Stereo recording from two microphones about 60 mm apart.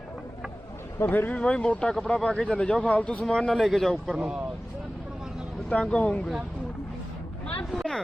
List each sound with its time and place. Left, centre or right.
1.0 s speech: left
3.2 s speech: centre
5.6 s speech: centre
7.7 s speech: centre